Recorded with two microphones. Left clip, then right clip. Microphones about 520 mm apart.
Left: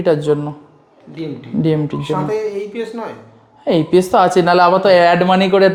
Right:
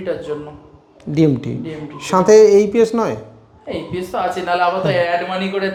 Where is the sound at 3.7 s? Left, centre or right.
Left.